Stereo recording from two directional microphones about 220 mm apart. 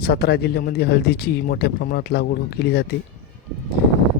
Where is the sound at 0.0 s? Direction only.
45° left (ahead or behind).